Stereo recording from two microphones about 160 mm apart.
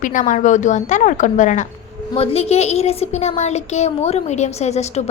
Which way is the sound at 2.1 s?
40° left (ahead or behind).